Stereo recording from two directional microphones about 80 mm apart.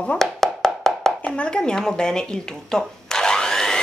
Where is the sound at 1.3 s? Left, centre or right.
Centre.